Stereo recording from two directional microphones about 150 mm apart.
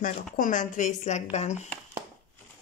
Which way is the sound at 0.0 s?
60° left (ahead or behind).